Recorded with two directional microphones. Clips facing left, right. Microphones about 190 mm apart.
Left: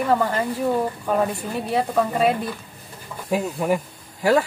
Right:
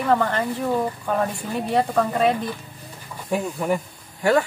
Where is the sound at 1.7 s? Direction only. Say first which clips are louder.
Right 1 dB; 5° left (ahead or behind).